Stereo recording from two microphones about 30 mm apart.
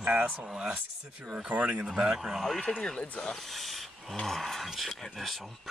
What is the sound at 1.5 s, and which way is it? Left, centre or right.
Speech, right.